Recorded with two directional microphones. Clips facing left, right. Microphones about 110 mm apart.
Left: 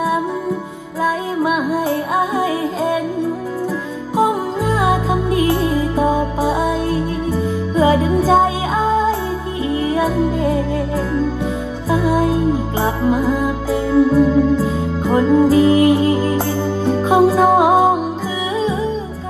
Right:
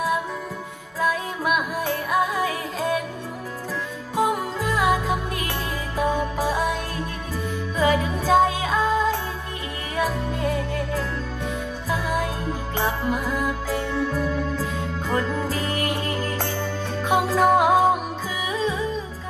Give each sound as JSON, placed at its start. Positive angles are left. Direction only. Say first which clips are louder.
{"t": 1.0, "sound": "music", "louder": "left 6 dB", "side_deg": 30}
{"t": 4.2, "sound": "music", "louder": "left 6 dB", "side_deg": 30}
{"t": 11.9, "sound": "music", "louder": "left 10 dB", "side_deg": 30}